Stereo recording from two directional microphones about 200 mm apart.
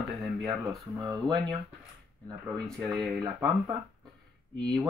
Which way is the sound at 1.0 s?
20° right (ahead or behind).